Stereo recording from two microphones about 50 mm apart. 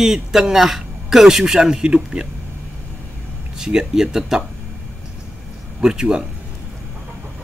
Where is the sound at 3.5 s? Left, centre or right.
Centre.